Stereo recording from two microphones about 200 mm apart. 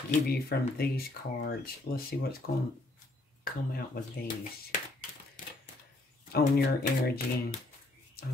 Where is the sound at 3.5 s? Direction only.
45° left (ahead or behind).